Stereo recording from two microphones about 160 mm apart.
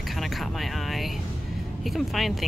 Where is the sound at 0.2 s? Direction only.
Centre (ahead or behind).